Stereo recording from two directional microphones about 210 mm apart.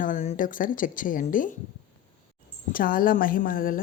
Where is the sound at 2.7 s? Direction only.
45° left (ahead or behind).